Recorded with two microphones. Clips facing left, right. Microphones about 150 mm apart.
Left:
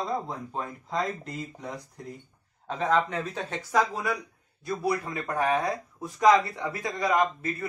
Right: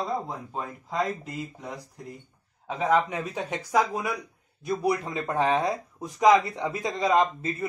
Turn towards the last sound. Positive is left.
turn(degrees=-25)  # may be behind; listen again after turning